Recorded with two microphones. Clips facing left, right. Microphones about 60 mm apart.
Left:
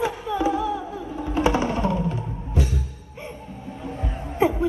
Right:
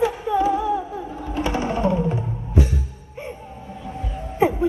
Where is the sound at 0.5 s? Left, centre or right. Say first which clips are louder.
Right 3 dB; right.